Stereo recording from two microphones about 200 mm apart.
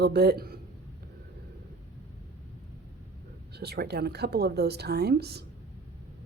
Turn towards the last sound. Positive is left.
turn(degrees=-55)  # may be behind; listen again after turning